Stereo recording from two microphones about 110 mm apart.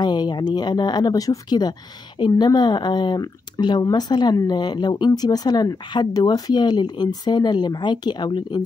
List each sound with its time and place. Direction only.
0.0 s speech: 40° left (ahead or behind)